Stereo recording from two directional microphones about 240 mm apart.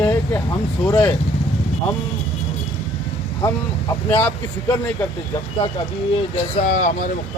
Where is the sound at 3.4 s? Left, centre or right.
Centre.